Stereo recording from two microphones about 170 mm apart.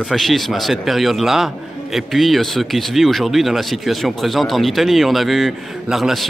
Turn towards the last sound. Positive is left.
turn(degrees=0)  # may be behind; listen again after turning